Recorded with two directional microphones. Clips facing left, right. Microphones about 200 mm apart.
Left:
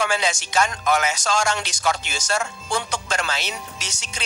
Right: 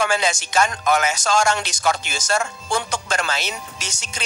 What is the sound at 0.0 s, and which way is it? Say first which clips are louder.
Speech: right 2 dB; 45° right (ahead or behind).